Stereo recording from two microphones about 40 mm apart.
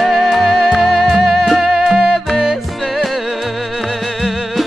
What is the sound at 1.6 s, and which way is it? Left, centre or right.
Music, centre.